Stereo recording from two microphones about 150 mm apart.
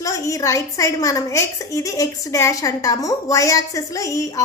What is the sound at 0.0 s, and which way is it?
A woman's voice, 20° left (ahead or behind).